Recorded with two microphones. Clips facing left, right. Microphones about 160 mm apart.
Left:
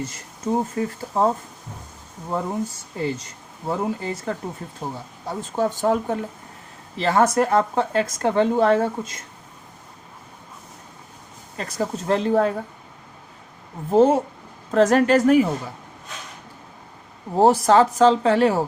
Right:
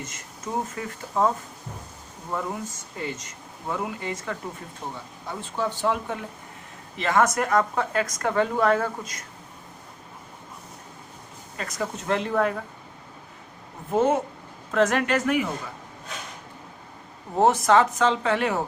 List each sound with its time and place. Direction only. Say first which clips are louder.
0.0 s speech: left 7 dB; 30° left (ahead or behind)
2.3 s speech: left 5 dB; 30° left (ahead or behind)
11.5 s speech: left 4 dB; 30° left (ahead or behind)
13.9 s speech: left 6 dB; 30° left (ahead or behind)
17.3 s speech: left 4 dB; 35° left (ahead or behind)